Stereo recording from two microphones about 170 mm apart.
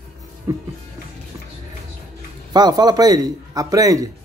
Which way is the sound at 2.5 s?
25° right (ahead or behind).